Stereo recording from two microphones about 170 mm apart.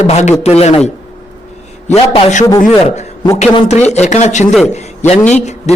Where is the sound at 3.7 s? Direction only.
40° left (ahead or behind).